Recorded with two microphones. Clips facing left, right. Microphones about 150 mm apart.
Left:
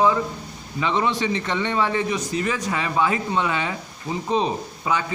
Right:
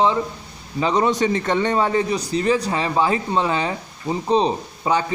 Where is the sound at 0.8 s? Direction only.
40° right (ahead or behind).